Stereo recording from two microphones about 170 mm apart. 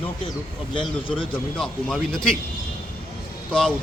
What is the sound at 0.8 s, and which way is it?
Speech, 30° left (ahead or behind).